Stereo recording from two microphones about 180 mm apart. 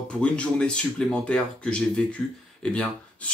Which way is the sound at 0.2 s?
5° left (ahead or behind).